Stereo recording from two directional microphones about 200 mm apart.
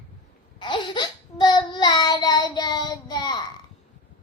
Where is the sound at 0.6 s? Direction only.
25° left (ahead or behind).